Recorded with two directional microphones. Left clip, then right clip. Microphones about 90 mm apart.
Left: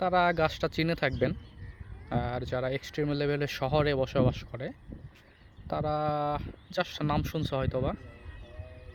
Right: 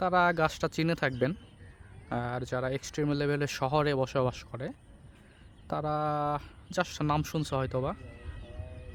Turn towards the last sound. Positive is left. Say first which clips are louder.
# left 1 dB
turn(degrees=-40)  # may be behind; listen again after turning